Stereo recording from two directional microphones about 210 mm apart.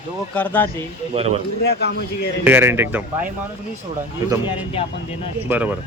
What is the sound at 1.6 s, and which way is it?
Speech, 50° left (ahead or behind).